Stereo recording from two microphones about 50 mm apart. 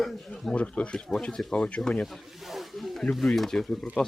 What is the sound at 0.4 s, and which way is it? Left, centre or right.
Speech, left.